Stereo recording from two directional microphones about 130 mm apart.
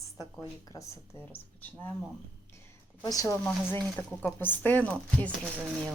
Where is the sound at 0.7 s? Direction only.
25° left (ahead or behind).